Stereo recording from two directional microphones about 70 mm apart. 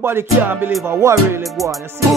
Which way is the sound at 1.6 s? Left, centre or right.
Centre.